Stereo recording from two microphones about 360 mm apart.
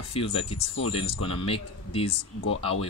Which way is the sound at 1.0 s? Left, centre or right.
Centre.